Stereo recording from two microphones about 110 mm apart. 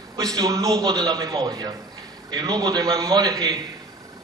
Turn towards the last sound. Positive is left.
turn(degrees=-35)  # may be behind; listen again after turning